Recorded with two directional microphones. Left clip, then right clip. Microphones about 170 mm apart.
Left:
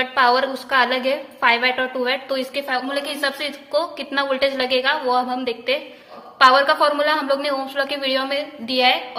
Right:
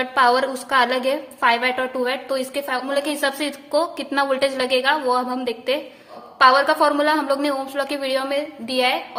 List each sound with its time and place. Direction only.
0.0 s a woman's voice: 40° right (ahead or behind)